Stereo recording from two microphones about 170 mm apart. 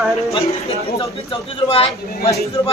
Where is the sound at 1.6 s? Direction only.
35° left (ahead or behind).